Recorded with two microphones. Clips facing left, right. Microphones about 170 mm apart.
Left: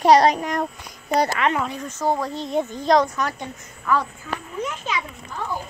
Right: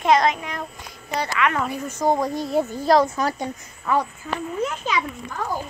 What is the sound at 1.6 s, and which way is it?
Speech, 10° right (ahead or behind).